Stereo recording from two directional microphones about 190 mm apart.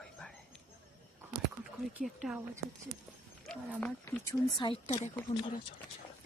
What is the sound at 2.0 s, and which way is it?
Speech, 5° right (ahead or behind).